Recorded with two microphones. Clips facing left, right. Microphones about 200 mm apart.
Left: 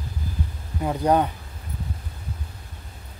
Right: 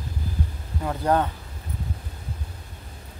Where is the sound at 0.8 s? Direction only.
15° left (ahead or behind).